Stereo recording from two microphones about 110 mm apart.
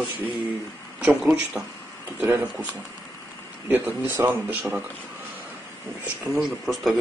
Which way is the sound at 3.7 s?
20° right (ahead or behind).